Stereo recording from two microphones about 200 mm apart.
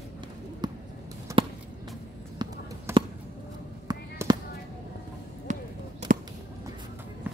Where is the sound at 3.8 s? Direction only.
20° right (ahead or behind).